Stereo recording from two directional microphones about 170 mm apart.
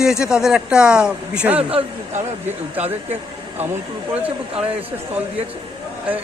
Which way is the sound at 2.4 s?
10° right (ahead or behind).